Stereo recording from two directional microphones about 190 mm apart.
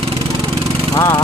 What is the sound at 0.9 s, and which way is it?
Lawn mower, 15° left (ahead or behind).